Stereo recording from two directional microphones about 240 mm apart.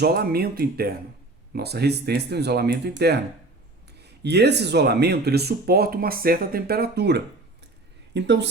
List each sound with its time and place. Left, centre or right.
0.0 s speech: right